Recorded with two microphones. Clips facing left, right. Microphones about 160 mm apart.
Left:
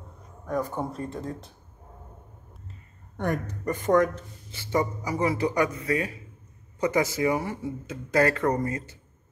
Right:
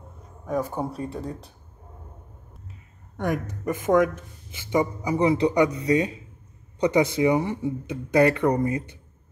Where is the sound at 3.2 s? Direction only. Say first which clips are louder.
Right 2 dB; 10° right (ahead or behind).